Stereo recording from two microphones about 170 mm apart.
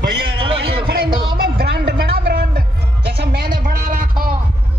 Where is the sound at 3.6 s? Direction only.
50° right (ahead or behind).